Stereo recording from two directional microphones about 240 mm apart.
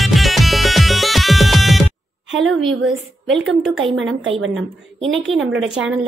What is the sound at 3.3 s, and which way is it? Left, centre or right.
A woman's voice, centre.